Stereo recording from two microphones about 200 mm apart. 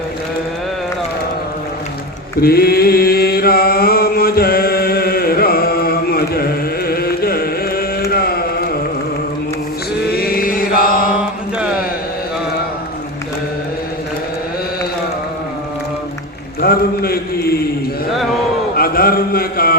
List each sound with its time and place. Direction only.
2.4 s mantra: 50° left (ahead or behind)
10.2 s chant: 45° left (ahead or behind)
16.6 s mantra: 50° left (ahead or behind)
18.8 s a sound: 50° left (ahead or behind)